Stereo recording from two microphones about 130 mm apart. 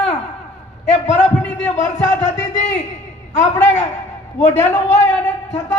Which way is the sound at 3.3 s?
70° left (ahead or behind).